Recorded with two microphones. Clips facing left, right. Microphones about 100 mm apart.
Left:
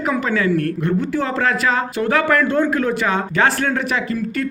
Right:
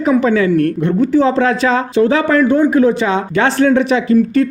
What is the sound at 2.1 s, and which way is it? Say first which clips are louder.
Speech: even; 20° right (ahead or behind).